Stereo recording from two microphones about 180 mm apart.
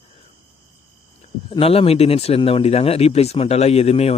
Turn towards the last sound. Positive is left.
turn(degrees=35)  # may be behind; listen again after turning